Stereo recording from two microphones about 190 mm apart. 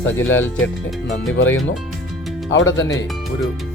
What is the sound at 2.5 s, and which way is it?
Speech, 75° left (ahead or behind).